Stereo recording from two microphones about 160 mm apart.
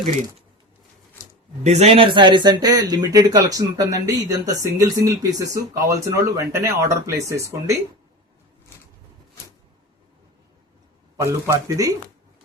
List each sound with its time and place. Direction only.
1.2 s a sound: 15° left (ahead or behind)
1.6 s speech: 45° right (ahead or behind); by 7.8 s 20° right (ahead or behind)
11.2 s speech: 15° right (ahead or behind)